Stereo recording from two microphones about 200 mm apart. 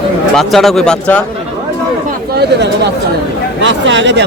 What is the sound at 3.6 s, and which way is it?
Speech, 65° right (ahead or behind).